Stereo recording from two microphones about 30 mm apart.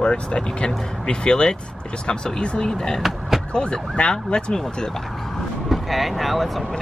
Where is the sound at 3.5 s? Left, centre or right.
Left.